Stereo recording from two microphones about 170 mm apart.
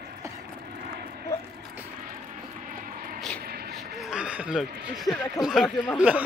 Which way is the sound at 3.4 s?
65° right (ahead or behind).